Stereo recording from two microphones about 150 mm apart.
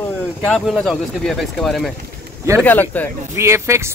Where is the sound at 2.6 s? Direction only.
10° left (ahead or behind).